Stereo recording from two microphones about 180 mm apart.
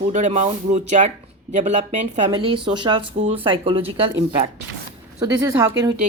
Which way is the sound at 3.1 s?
40° right (ahead or behind).